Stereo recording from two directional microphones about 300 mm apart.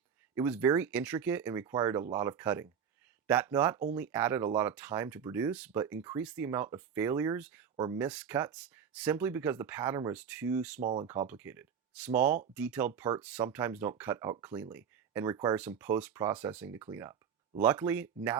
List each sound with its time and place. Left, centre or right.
0.3 s speech: centre
10.8 s speech: right
11.0 s speech: centre
13.0 s speech: centre